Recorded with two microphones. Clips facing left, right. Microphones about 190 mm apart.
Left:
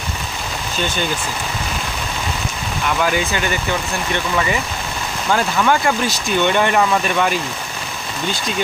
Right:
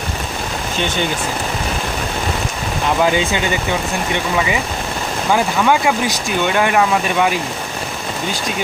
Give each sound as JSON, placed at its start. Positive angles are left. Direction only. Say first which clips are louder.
{"t": 3.0, "sound": "speech", "louder": "right 3 dB", "side_deg": -20}
{"t": 5.3, "sound": "speech", "louder": "right 2 dB", "side_deg": -15}